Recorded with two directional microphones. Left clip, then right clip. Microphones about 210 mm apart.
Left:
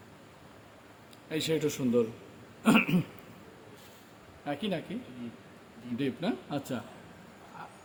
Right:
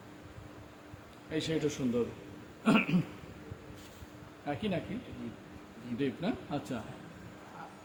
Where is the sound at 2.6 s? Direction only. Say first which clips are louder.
Left 3 dB; 40° left (ahead or behind).